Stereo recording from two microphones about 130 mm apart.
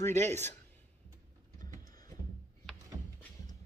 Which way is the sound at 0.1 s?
60° right (ahead or behind).